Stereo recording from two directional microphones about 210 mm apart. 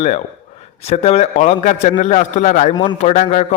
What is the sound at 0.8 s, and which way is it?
A man's voice, 30° left (ahead or behind).